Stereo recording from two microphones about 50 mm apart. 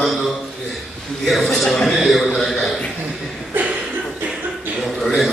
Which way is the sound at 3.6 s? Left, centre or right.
Right.